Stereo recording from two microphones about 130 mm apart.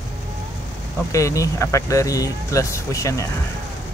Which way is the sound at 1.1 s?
25° left (ahead or behind).